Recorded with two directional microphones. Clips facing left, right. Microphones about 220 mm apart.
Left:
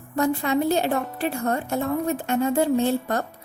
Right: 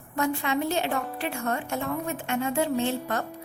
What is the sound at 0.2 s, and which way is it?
Speech, 35° left (ahead or behind).